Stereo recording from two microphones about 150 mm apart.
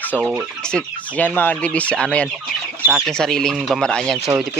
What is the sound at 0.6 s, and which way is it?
Speech, 10° left (ahead or behind).